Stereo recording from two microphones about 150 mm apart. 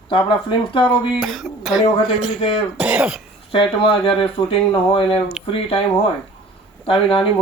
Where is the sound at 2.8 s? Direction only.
5° right (ahead or behind).